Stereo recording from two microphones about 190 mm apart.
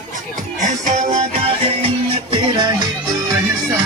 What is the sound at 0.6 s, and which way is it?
Music, 40° right (ahead or behind).